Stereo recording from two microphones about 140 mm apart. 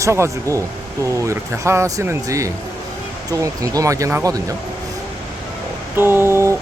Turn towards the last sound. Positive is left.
turn(degrees=-20)  # may be behind; listen again after turning